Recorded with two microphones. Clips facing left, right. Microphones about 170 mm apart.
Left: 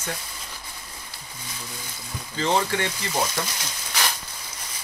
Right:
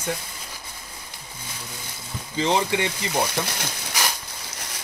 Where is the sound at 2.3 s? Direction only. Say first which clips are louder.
Right 1 dB; 15° right (ahead or behind).